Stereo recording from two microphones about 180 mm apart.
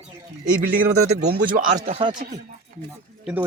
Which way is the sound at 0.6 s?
45° right (ahead or behind).